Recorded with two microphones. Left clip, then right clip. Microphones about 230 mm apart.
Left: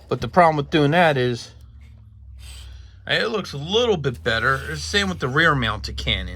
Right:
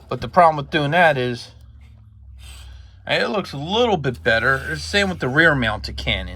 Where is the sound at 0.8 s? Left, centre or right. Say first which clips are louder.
Even; left.